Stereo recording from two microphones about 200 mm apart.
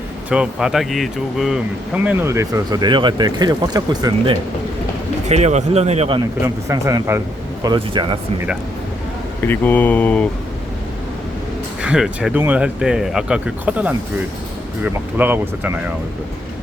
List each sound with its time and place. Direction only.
0.3 s speech: 5° right (ahead or behind)
2.0 s speech: 15° right (ahead or behind)
5.3 s speech: 35° right (ahead or behind)
6.4 s speech: 15° right (ahead or behind)
9.4 s speech: 10° left (ahead or behind)
11.8 s speech: 5° right (ahead or behind)